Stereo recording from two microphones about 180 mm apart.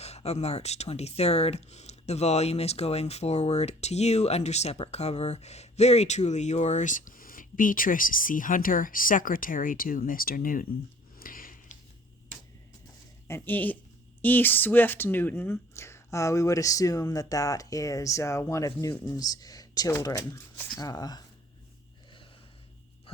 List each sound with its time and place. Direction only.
0.0 s speech: 35° left (ahead or behind)
11.2 s a sound: 50° left (ahead or behind)
13.2 s speech: 10° left (ahead or behind)